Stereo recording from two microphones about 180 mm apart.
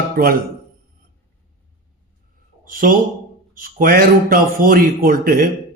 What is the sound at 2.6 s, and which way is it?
Speech, 50° right (ahead or behind).